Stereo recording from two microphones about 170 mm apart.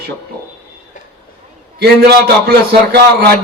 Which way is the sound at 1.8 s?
70° right (ahead or behind).